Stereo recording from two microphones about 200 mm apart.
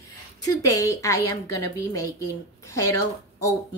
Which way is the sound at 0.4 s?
15° left (ahead or behind).